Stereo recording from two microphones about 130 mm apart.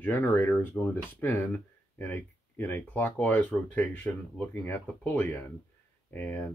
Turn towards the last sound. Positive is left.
turn(degrees=15)  # may be behind; listen again after turning